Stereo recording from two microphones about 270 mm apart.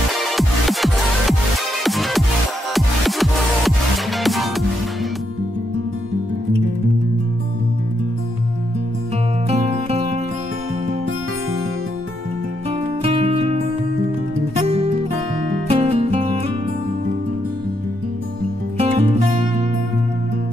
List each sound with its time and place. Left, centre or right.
0.1 s music: centre
9.5 s music: right
13.0 s music: right
18.8 s music: right